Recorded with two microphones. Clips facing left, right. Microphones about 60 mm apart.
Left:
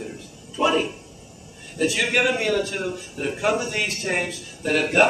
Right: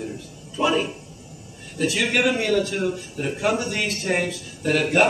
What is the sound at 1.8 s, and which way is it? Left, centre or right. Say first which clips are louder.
A man's voice: even; centre.